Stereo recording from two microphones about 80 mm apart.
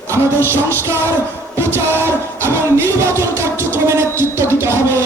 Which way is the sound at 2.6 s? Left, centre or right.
Right.